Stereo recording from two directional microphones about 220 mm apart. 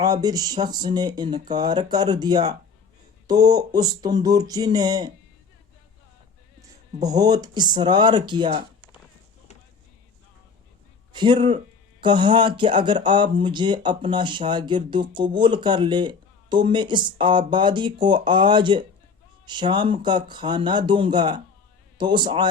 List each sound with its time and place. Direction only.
0.0 s speech: 15° right (ahead or behind)
7.2 s speech: 15° right (ahead or behind)
11.1 s speech: 20° right (ahead or behind)